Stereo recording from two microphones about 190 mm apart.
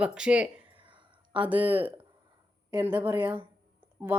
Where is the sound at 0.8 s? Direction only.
25° right (ahead or behind).